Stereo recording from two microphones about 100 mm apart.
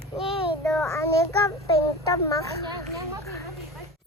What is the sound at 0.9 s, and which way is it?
A child's voice, 30° left (ahead or behind).